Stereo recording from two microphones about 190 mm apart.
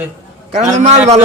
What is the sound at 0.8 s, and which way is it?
Speech, 35° right (ahead or behind).